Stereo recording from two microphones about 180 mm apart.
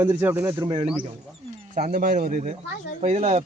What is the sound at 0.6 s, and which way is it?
Speech, 25° right (ahead or behind).